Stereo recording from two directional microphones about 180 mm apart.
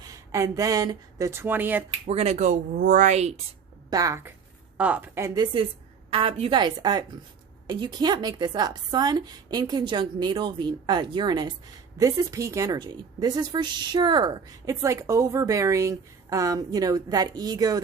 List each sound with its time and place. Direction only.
0.0 s speech: 20° right (ahead or behind)
2.0 s speech: 35° right (ahead or behind)
3.8 s a woman's voice: 20° right (ahead or behind)